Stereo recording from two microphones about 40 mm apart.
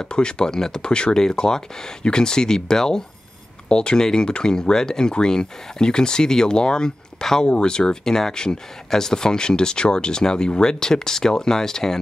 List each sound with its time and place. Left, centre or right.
0.0 s speech: left